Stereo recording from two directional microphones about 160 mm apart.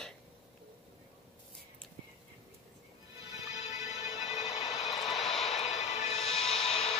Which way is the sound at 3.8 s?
45° left (ahead or behind).